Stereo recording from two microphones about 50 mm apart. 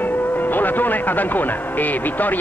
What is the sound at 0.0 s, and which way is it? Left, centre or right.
Speech, left.